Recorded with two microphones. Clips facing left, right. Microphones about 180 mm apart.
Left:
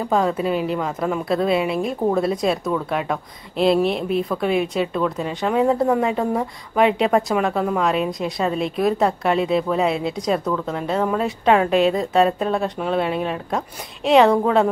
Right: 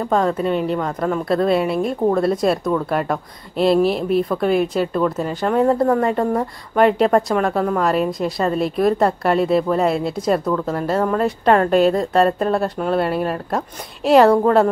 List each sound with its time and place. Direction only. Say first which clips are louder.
0.1 s a woman's voice: right 1 dB; 5° left (ahead or behind)